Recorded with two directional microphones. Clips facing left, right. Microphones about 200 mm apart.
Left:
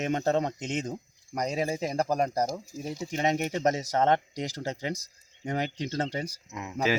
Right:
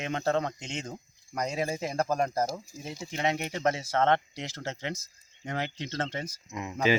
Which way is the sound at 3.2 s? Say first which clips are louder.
Left 2 dB; 40° left (ahead or behind).